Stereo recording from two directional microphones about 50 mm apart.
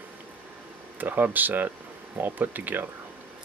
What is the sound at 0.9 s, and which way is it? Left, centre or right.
Speech, right.